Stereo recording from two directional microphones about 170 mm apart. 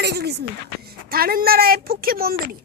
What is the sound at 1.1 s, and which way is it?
A woman's voice, 60° right (ahead or behind).